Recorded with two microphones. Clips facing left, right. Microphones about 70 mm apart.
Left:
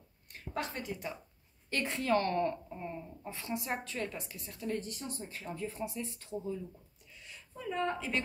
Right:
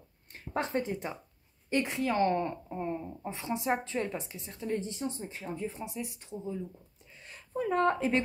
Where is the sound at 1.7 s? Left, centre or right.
Centre.